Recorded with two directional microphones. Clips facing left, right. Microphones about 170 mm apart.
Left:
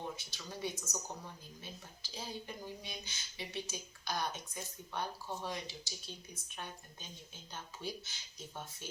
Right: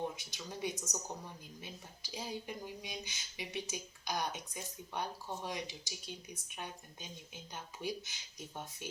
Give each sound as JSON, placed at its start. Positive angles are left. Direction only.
{"t": 0.2, "sound": "speech", "side_deg": -15}